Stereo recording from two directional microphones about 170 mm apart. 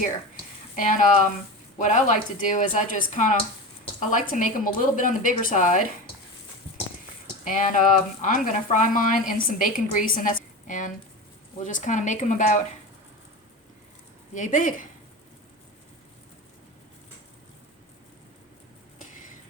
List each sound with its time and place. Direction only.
0.8 s speech: 50° left (ahead or behind)
7.4 s speech: 50° left (ahead or behind)
14.3 s speech: 50° left (ahead or behind)